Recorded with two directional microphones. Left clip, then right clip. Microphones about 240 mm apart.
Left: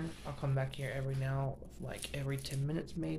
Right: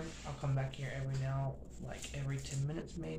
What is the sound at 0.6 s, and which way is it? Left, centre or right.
Speech, left.